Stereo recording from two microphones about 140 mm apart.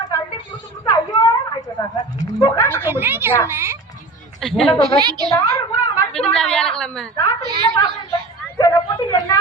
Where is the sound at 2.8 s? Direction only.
15° right (ahead or behind).